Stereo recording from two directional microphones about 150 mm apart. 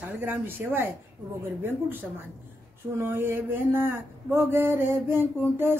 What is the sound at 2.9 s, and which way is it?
Speech, 15° right (ahead or behind).